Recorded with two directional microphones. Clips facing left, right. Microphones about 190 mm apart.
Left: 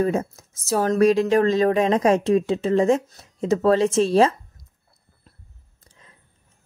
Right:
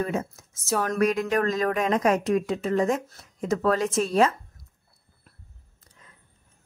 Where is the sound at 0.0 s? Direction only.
35° left (ahead or behind).